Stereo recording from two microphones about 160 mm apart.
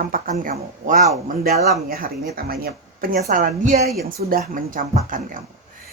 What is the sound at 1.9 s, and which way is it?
Speech, 65° right (ahead or behind).